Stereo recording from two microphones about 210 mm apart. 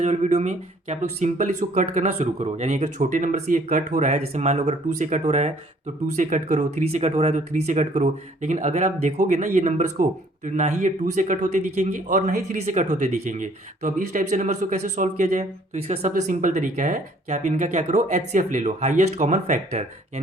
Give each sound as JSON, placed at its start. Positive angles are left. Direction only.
{"t": 0.0, "sound": "speech", "side_deg": -35}